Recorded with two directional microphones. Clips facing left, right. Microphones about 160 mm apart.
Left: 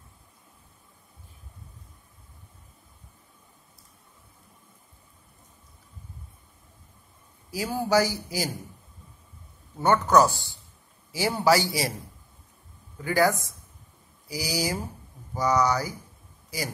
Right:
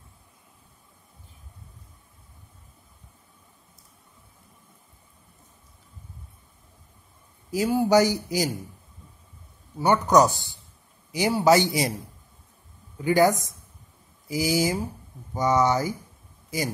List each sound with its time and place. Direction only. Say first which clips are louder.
7.7 s speech: right 4 dB; 20° right (ahead or behind)
9.8 s a man's voice: right 1 dB; 15° right (ahead or behind)
13.0 s speech: right 3 dB; 20° right (ahead or behind)
16.4 s a sound: right 5 dB; 20° right (ahead or behind)